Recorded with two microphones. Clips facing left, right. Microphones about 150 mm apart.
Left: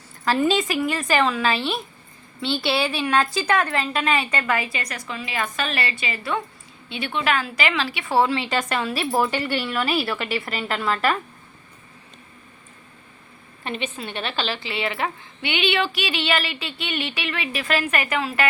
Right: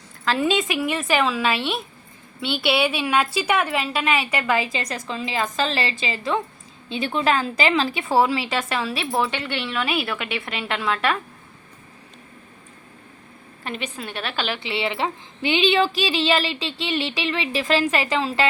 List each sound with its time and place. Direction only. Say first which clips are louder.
0.3 s a woman's voice: left 1 dB; centre (ahead or behind); by 6.4 s 25° right (ahead or behind)
6.8 s a woman's voice: right 3 dB; 35° right (ahead or behind)
8.0 s a woman's voice: left 2 dB; 15° right (ahead or behind)
13.9 s a woman's voice: even; 5° right (ahead or behind); by 15.1 s 20° right (ahead or behind)
15.4 s a woman's voice: right 4 dB; 35° right (ahead or behind)